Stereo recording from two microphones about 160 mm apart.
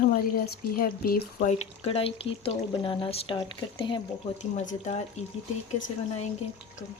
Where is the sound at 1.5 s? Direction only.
40° left (ahead or behind).